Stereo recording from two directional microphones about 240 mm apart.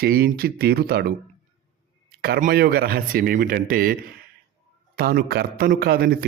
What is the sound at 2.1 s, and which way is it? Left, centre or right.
Speech, right.